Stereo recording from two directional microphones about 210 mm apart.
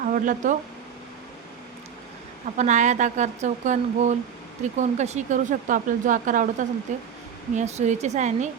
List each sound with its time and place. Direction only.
0.0 s speech: 40° right (ahead or behind)
2.6 s speech: 35° right (ahead or behind)